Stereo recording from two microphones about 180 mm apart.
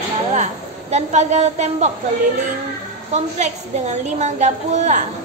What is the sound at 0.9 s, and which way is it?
Speech, 40° right (ahead or behind).